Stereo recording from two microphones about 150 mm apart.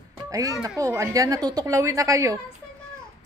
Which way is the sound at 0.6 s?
20° right (ahead or behind).